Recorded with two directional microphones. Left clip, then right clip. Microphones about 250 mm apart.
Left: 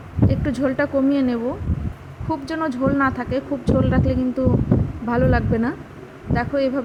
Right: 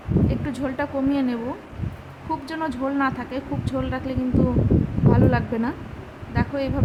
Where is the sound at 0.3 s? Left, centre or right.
Centre.